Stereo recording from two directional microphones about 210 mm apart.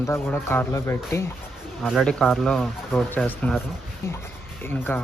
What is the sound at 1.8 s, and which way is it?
Speech, centre (ahead or behind).